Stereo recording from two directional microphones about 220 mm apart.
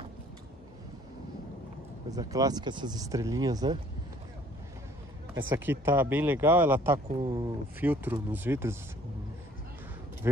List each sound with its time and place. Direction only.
2.1 s speech: 15° right (ahead or behind)
5.5 s speech: 10° right (ahead or behind)
7.2 s speech: 20° right (ahead or behind)
7.8 s speech: 10° right (ahead or behind)
10.2 s speech: 10° right (ahead or behind)